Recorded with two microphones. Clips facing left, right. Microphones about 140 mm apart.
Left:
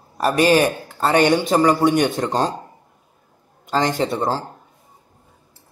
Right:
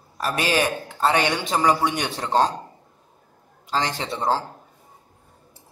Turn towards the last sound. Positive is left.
turn(degrees=45)  # may be behind; listen again after turning